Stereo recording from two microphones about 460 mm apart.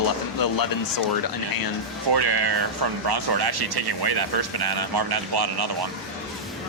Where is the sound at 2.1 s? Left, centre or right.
Right.